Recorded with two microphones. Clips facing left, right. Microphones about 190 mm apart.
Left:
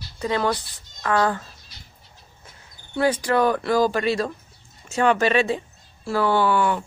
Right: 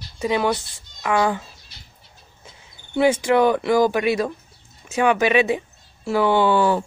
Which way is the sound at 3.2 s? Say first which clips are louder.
Right 3 dB; 15° right (ahead or behind).